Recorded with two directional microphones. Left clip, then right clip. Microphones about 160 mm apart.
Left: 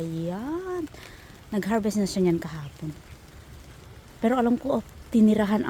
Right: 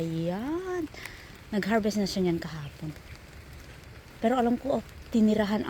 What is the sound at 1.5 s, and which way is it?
A woman's voice, 15° left (ahead or behind).